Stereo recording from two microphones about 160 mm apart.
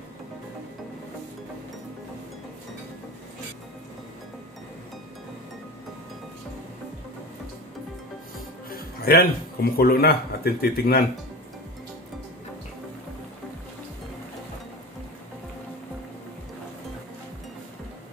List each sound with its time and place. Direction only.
8.6 s speech: 65° left (ahead or behind)